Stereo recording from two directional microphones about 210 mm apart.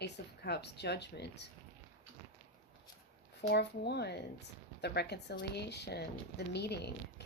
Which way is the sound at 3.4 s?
55° left (ahead or behind).